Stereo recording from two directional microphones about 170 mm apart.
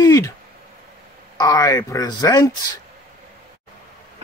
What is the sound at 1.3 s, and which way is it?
A man's voice, 20° left (ahead or behind).